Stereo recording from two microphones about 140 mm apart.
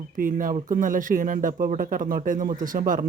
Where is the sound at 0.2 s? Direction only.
75° right (ahead or behind).